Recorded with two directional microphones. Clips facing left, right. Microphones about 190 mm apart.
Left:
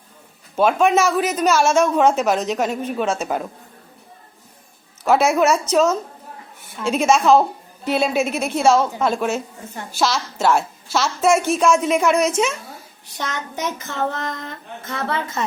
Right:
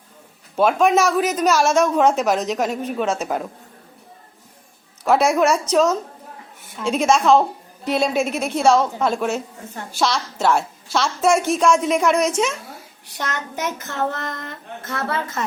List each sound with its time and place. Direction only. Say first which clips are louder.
0.5 s a woman's voice: even; centre (ahead or behind)
5.0 s a woman's voice: even; 5° left (ahead or behind)
14.1 s child singing: left 1 dB; 15° left (ahead or behind)